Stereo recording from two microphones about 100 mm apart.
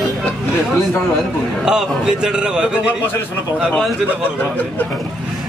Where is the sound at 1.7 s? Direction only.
5° right (ahead or behind).